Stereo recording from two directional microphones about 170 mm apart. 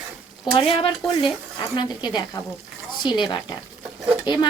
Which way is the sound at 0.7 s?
30° left (ahead or behind).